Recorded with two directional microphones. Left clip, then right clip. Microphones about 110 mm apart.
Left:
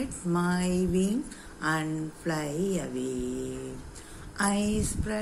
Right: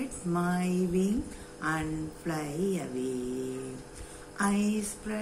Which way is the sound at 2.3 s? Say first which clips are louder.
Left 2 dB; 30° left (ahead or behind).